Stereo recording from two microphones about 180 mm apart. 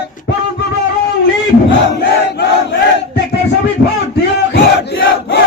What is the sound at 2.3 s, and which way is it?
Battle cry, 70° left (ahead or behind).